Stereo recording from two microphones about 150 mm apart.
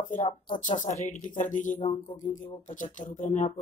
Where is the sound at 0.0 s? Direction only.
60° left (ahead or behind).